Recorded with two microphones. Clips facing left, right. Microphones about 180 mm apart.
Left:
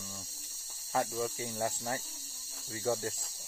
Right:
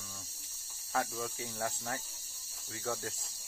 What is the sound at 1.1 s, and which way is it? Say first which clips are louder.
Speech: left 5 dB; 10° left (ahead or behind).